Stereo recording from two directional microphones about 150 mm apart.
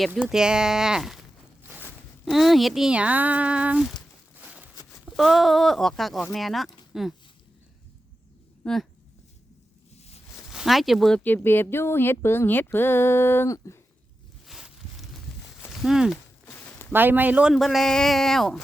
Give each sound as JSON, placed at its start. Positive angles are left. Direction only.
{"t": 0.1, "sound": "speech", "side_deg": -5}
{"t": 2.3, "sound": "speech", "side_deg": 0}
{"t": 4.4, "sound": "a sound", "side_deg": -10}
{"t": 5.0, "sound": "speech", "side_deg": 0}
{"t": 8.6, "sound": "speech", "side_deg": 5}
{"t": 10.3, "sound": "speech", "side_deg": 0}
{"t": 14.4, "sound": "a sound", "side_deg": 0}
{"t": 15.7, "sound": "speech", "side_deg": 0}
{"t": 16.5, "sound": "a sound", "side_deg": 15}
{"t": 16.9, "sound": "speech", "side_deg": -15}